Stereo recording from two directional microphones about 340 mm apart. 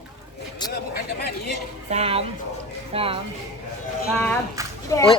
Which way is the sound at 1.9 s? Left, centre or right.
Centre.